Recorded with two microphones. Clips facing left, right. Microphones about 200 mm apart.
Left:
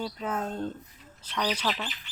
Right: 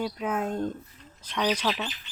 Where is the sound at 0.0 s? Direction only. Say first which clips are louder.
Right 3 dB; 10° right (ahead or behind).